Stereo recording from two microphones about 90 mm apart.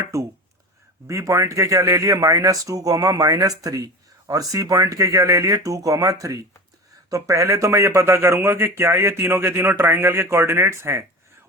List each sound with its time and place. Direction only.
0.0 s speech: 35° right (ahead or behind)